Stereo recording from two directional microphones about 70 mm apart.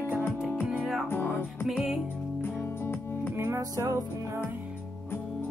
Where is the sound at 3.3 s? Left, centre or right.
Right.